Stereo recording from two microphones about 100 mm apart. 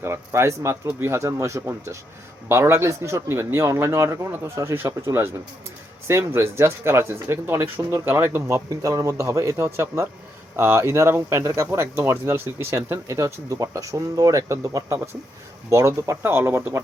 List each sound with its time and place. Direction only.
0.0 s speech: 25° right (ahead or behind)